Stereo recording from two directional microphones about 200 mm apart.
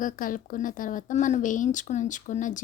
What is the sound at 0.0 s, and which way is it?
Speech, 45° left (ahead or behind).